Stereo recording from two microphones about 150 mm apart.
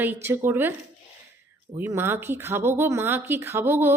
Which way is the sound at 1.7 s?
15° right (ahead or behind).